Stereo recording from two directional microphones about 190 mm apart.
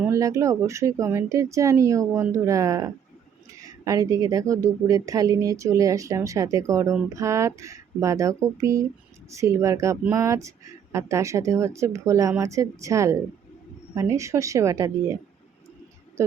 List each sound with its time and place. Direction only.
0.0 s a woman's voice: 15° right (ahead or behind)